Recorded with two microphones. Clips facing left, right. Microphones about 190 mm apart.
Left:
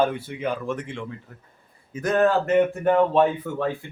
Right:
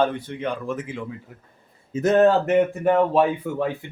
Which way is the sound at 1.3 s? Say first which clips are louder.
Right 2 dB; 15° right (ahead or behind).